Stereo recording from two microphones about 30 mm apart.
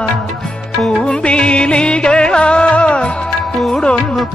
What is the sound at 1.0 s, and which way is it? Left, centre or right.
Music, left.